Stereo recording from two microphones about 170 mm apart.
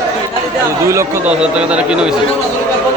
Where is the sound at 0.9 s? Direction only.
15° right (ahead or behind).